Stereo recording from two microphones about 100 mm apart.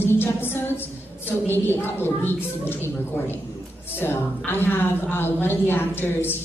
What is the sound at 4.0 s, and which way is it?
A woman's voice, 20° left (ahead or behind).